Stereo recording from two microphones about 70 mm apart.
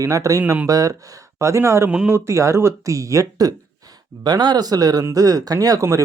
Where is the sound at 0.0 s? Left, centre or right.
Right.